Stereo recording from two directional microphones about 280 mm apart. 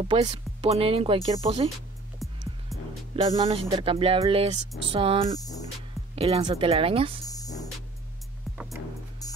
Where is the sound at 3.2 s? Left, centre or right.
Centre.